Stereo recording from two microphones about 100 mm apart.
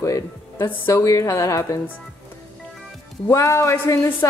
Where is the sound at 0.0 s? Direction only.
35° left (ahead or behind).